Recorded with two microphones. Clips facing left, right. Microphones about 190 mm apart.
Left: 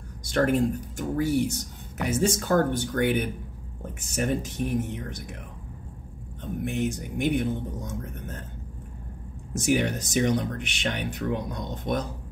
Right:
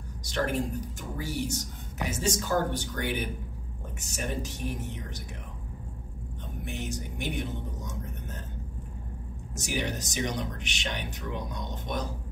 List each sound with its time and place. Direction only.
0.2 s a woman's voice: 50° left (ahead or behind)
6.6 s speech: 55° left (ahead or behind)
9.5 s speech: 55° left (ahead or behind)